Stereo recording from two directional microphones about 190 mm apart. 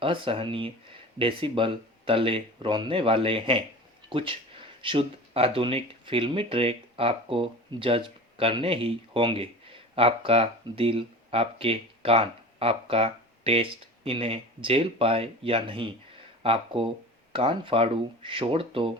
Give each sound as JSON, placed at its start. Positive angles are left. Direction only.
{"t": 0.0, "sound": "speech", "side_deg": -30}